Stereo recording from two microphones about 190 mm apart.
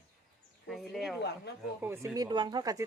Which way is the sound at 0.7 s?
Centre (ahead or behind).